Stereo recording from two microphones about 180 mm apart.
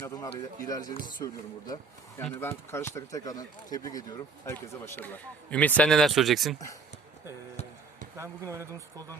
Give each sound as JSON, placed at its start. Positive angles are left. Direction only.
{"t": 0.0, "sound": "speech", "side_deg": 20}
{"t": 8.1, "sound": "speech", "side_deg": -15}